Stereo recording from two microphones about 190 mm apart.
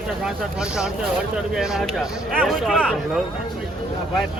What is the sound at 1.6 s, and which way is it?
Speech, centre (ahead or behind).